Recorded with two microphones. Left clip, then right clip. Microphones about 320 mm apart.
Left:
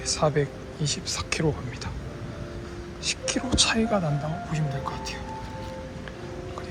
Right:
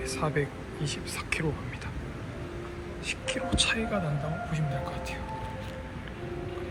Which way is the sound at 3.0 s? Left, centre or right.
Centre.